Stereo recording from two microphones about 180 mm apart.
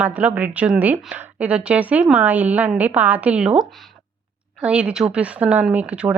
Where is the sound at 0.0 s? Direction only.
10° right (ahead or behind).